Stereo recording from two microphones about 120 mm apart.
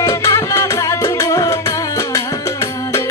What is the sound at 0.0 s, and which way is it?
Music, 25° left (ahead or behind).